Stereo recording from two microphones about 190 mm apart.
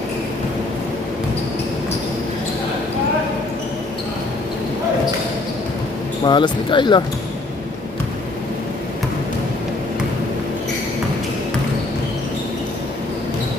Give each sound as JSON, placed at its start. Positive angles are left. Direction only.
{"t": 6.2, "sound": "speech", "side_deg": 25}